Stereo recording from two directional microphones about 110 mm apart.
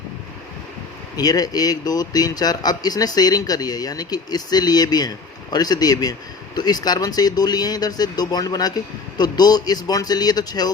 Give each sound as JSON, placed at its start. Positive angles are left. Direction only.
{"t": 1.1, "sound": "speech", "side_deg": 35}